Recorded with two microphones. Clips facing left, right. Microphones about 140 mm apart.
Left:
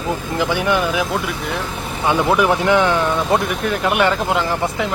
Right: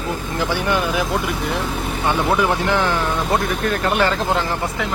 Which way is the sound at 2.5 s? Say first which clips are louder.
Left 4 dB; 20° left (ahead or behind).